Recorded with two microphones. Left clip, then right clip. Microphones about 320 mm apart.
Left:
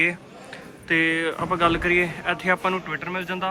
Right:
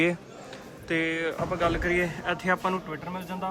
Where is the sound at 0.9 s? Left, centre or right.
Centre.